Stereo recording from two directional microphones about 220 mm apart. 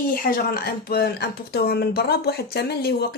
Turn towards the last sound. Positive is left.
turn(degrees=45)  # may be behind; listen again after turning